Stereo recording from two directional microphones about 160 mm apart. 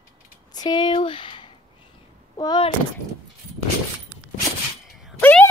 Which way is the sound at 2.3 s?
25° left (ahead or behind).